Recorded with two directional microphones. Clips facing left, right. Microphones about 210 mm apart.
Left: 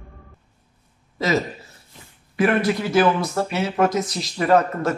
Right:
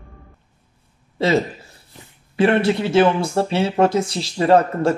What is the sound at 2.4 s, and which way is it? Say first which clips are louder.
Speech: right 3 dB; 30° right (ahead or behind).